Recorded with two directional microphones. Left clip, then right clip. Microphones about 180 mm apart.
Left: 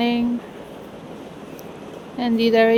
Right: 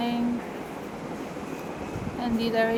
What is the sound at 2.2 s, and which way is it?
Speech, 55° left (ahead or behind).